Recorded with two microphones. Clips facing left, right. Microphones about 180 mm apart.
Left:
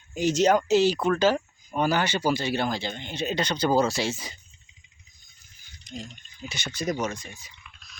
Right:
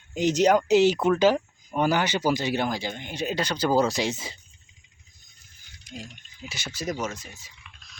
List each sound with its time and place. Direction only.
0.1 s speech: 20° right (ahead or behind)
5.9 s speech: 5° right (ahead or behind)